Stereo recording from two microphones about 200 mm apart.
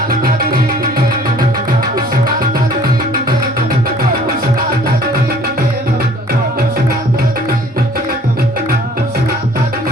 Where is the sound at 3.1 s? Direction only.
45° right (ahead or behind).